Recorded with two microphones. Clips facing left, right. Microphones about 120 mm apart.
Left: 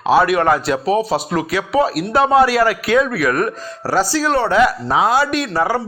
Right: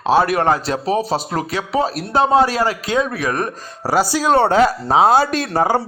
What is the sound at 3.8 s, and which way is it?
Speech, 15° right (ahead or behind).